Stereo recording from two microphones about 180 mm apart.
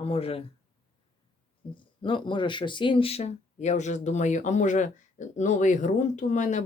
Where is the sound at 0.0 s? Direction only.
35° left (ahead or behind).